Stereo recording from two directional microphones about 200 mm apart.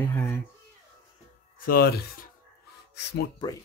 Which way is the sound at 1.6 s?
50° left (ahead or behind).